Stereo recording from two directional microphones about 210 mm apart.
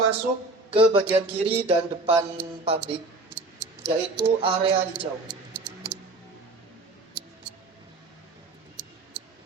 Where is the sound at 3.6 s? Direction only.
55° right (ahead or behind).